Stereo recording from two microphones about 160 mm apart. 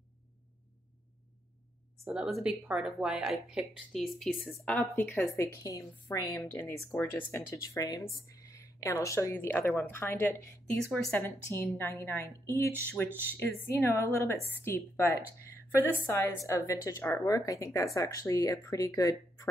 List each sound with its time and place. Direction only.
2.4 s speech: 5° right (ahead or behind)
4.9 s a woman's voice: 15° left (ahead or behind)